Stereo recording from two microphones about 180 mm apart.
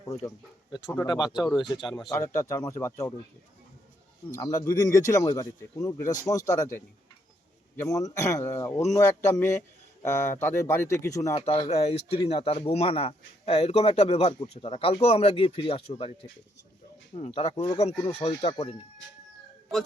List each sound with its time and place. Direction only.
0.0 s speech: 20° left (ahead or behind)
1.8 s speech: centre (ahead or behind)
2.0 s speech: 15° left (ahead or behind)
4.3 s speech: 15° left (ahead or behind)
7.8 s speech: 20° left (ahead or behind)
11.3 s speech: 30° left (ahead or behind)
17.2 s speech: 35° left (ahead or behind)
18.3 s speech: 25° left (ahead or behind)